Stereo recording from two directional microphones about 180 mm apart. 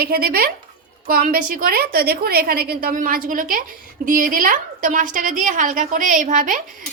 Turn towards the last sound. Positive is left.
turn(degrees=-50)  # may be behind; listen again after turning